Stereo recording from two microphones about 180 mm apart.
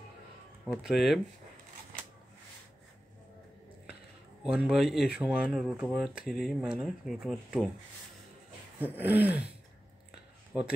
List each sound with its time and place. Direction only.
0.8 s speech: centre (ahead or behind)
4.4 s speech: 5° right (ahead or behind)
8.7 s a sound: 10° right (ahead or behind)